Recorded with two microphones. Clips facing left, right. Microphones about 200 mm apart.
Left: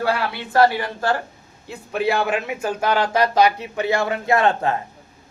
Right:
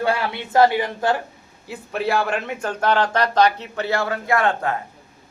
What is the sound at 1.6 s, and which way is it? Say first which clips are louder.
Speech: left 2 dB; 5° right (ahead or behind).